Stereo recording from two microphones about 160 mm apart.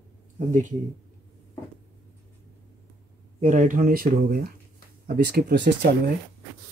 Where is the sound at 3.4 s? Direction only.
50° right (ahead or behind).